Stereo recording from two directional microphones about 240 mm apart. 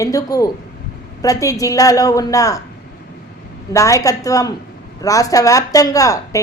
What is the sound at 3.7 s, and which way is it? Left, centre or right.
Speech, centre.